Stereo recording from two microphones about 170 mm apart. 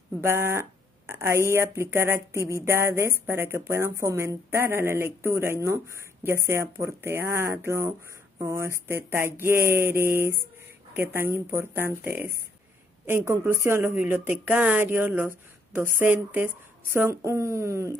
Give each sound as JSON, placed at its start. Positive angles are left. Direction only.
{"t": 0.2, "sound": "speech", "side_deg": -15}